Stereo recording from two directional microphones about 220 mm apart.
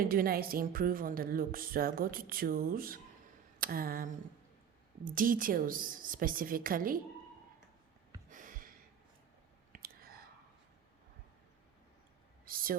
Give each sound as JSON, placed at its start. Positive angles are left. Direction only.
{"t": 0.0, "sound": "a woman's voice", "side_deg": -40}
{"t": 8.3, "sound": "gasp", "side_deg": -35}
{"t": 9.7, "sound": "whispering", "side_deg": -40}
{"t": 12.5, "sound": "a sound", "side_deg": -40}